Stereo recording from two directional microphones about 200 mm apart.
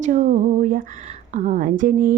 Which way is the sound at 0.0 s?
40° right (ahead or behind).